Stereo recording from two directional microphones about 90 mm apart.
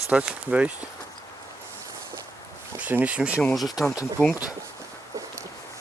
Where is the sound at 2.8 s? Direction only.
20° right (ahead or behind).